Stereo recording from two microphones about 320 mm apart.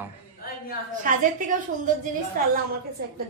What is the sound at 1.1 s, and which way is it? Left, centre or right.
Speech, right.